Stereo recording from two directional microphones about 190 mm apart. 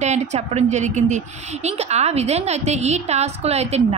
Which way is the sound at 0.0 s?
35° right (ahead or behind).